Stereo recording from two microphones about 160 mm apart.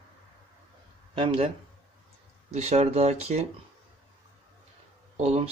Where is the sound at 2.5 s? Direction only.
40° right (ahead or behind).